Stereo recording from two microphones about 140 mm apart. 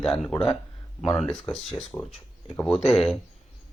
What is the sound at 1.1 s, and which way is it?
Speech, centre (ahead or behind).